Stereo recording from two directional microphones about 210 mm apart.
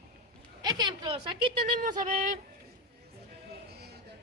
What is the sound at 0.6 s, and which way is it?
A woman's voice, 20° right (ahead or behind).